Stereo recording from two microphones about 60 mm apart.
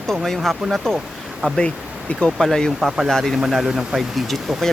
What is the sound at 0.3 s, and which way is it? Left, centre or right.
Speech, centre.